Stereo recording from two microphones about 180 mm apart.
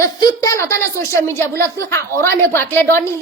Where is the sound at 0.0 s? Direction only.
20° left (ahead or behind).